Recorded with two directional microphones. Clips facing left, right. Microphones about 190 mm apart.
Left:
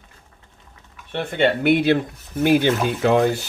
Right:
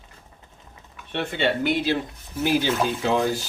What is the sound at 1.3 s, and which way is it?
Speech, 60° left (ahead or behind).